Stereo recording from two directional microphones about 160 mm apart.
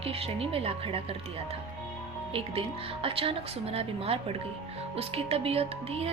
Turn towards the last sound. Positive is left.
turn(degrees=-40)  # may be behind; listen again after turning